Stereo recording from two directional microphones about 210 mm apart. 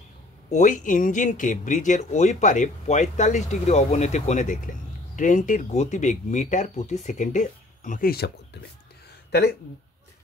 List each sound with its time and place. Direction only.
0.5 s speech: 35° left (ahead or behind)